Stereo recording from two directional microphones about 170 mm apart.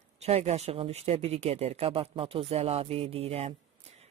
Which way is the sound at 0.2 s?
40° right (ahead or behind).